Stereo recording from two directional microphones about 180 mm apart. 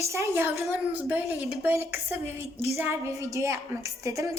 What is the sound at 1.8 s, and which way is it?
Speech, 35° left (ahead or behind).